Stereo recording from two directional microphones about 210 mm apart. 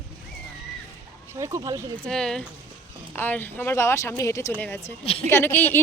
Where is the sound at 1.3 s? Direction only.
15° right (ahead or behind).